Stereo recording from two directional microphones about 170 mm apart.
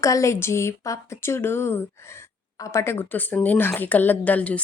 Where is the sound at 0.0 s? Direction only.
20° left (ahead or behind).